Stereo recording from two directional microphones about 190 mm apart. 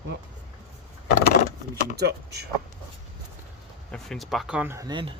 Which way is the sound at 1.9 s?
60° right (ahead or behind).